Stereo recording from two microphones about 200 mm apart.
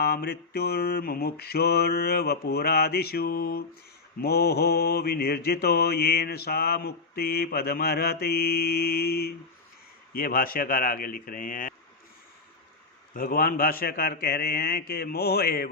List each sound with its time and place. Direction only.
0.0 s mantra: 50° left (ahead or behind)
13.1 s mantra: 45° left (ahead or behind)